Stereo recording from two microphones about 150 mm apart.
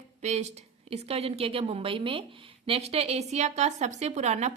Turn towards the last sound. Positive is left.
turn(degrees=-50)  # may be behind; listen again after turning